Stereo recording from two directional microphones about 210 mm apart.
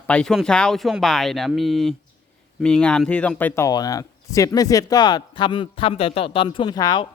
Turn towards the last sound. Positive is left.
turn(degrees=20)  # may be behind; listen again after turning